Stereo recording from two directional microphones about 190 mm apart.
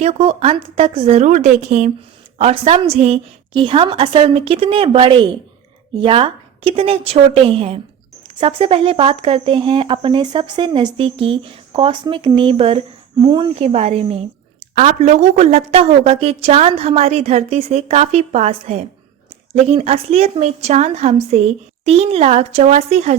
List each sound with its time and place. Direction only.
0.0 s a woman's voice: 35° right (ahead or behind)